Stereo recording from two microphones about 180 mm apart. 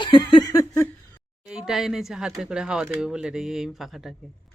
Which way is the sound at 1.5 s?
5° right (ahead or behind).